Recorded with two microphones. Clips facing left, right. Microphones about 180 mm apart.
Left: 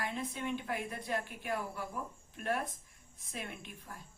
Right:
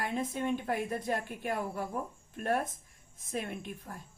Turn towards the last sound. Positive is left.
turn(degrees=-45)  # may be behind; listen again after turning